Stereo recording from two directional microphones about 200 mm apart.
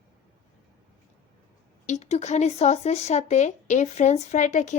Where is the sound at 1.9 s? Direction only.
35° left (ahead or behind).